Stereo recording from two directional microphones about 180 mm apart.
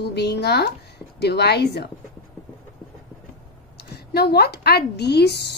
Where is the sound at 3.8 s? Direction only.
65° left (ahead or behind).